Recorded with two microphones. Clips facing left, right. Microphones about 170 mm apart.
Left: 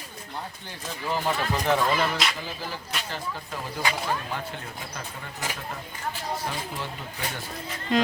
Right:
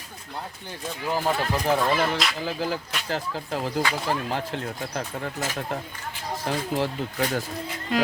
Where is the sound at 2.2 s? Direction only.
Centre (ahead or behind).